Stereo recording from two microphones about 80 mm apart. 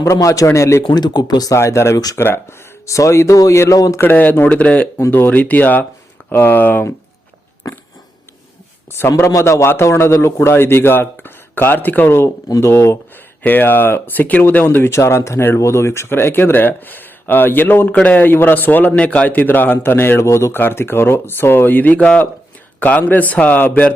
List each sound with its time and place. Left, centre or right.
0.0 s a man's voice: left
0.9 s speech: left
1.5 s a man's voice: left
4.0 s speech: left
7.6 s a sound: left
8.9 s a man's voice: left
13.4 s speech: left
20.6 s speech: left